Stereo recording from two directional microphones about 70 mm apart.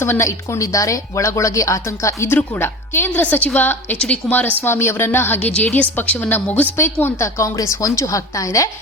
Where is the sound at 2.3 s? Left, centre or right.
Left.